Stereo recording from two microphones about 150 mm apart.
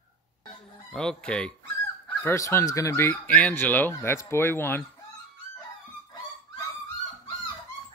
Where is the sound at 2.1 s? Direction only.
15° left (ahead or behind).